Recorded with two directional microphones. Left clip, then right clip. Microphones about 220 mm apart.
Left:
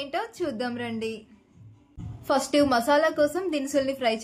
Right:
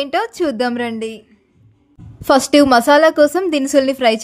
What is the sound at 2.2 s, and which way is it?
A woman's voice, 50° right (ahead or behind).